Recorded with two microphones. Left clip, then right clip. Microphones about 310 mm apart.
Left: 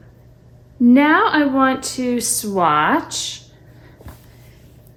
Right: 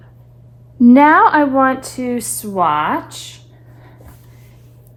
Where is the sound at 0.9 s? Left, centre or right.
Centre.